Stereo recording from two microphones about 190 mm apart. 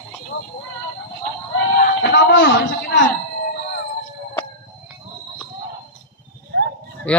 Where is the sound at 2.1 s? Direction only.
65° left (ahead or behind).